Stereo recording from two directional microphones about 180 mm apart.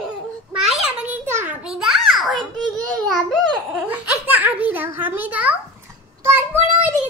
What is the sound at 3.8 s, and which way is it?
A child's voice, 10° right (ahead or behind).